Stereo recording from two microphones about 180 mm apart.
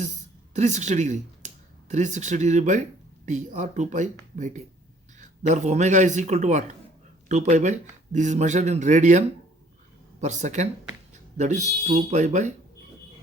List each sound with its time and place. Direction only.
0.0 s speech: 40° right (ahead or behind)